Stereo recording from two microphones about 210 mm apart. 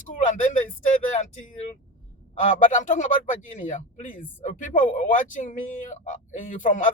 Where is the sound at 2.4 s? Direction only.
35° left (ahead or behind).